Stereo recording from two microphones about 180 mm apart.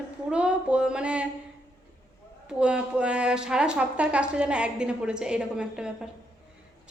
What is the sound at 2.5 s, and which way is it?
A woman's voice, 5° right (ahead or behind).